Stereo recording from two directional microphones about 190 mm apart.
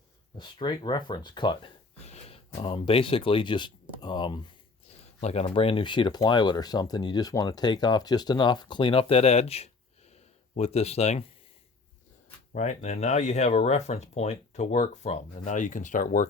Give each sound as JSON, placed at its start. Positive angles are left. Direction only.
{"t": 0.3, "sound": "speech", "side_deg": 25}
{"t": 12.5, "sound": "speech", "side_deg": 40}